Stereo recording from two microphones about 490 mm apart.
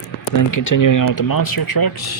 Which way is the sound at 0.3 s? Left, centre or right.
Left.